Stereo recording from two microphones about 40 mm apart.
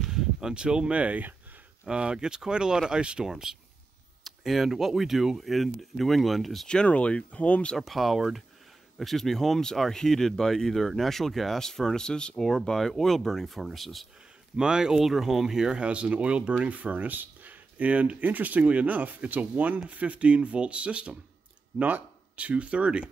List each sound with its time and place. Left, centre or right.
0.1 s a sound: centre
1.0 s speech: right
1.9 s speech: right
3.3 s speech: centre
6.9 s speech: left
7.8 s speech: centre
12.7 s speech: centre
14.6 s speech: centre
15.0 s speech: centre
15.8 s speech: right
16.5 s speech: right
21.7 s a sound: right
22.5 s speech: right